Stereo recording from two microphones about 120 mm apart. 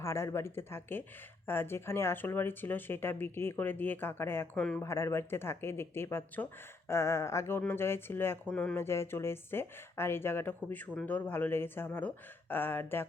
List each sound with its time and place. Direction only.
0.0 s speech: 20° left (ahead or behind)
4.5 s speech: 5° left (ahead or behind)
4.8 s speech: 25° left (ahead or behind)